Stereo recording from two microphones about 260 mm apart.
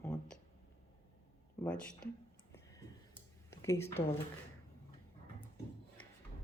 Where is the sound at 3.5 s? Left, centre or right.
Centre.